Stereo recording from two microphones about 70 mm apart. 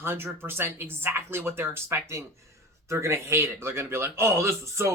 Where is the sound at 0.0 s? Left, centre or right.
Right.